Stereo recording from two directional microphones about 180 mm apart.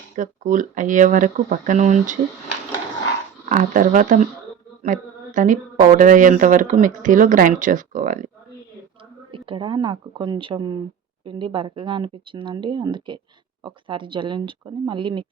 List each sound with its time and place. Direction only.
0.2 s a woman's voice: 45° right (ahead or behind)
3.5 s a woman's voice: 45° right (ahead or behind)
9.5 s speech: 25° right (ahead or behind)